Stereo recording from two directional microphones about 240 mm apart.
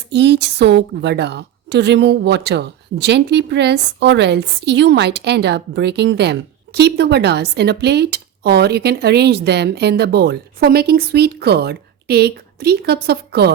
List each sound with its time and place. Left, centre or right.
0.1 s a woman's voice: right